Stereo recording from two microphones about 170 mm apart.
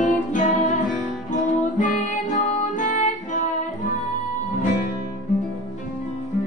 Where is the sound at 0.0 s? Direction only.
50° left (ahead or behind).